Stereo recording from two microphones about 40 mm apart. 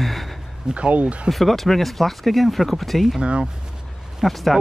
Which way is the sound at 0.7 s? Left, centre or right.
Right.